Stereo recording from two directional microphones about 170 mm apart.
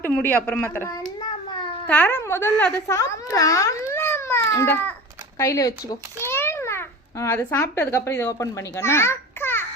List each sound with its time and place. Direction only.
0.0 s speech: 10° left (ahead or behind)
1.9 s a child's voice: 10° left (ahead or behind)